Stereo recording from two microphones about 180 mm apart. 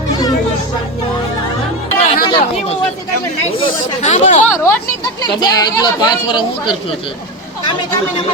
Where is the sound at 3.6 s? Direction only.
40° left (ahead or behind).